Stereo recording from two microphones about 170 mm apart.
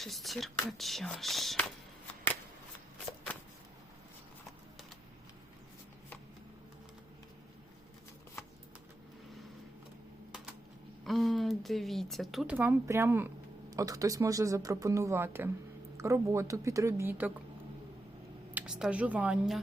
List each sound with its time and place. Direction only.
0.0 s speech: centre (ahead or behind)
11.0 s speech: centre (ahead or behind)
18.5 s a woman's voice: 5° right (ahead or behind)